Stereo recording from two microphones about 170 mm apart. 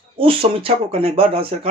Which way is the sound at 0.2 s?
30° right (ahead or behind).